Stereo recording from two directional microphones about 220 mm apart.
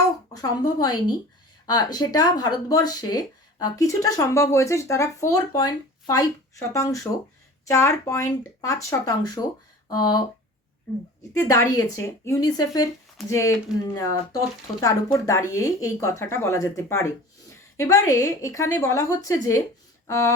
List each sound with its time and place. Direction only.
0.3 s speech: 15° left (ahead or behind)
11.3 s speech: 10° left (ahead or behind)